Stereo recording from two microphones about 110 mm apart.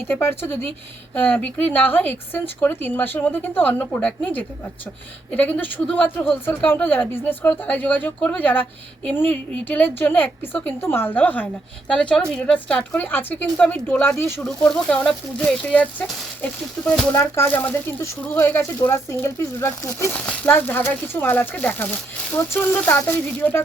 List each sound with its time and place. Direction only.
0.1 s speech: 20° left (ahead or behind)
14.2 s speech: 20° left (ahead or behind)
14.4 s speech: 5° left (ahead or behind)
17.1 s speech: 25° left (ahead or behind)
18.8 s speech: 25° left (ahead or behind)
20.1 s speech: 15° left (ahead or behind)